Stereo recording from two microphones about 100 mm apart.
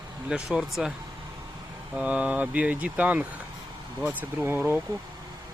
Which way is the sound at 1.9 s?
10° right (ahead or behind).